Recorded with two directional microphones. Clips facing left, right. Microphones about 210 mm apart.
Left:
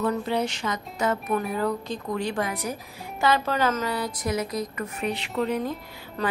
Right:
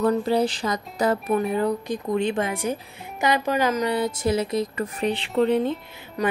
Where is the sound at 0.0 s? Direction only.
35° right (ahead or behind).